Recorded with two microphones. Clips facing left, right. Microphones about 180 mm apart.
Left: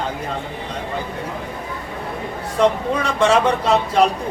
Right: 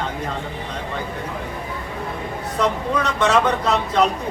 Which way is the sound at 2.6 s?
30° left (ahead or behind).